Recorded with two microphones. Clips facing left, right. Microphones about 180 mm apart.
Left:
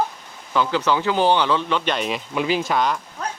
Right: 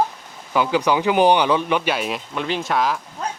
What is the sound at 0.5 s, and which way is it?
Speech, 15° right (ahead or behind).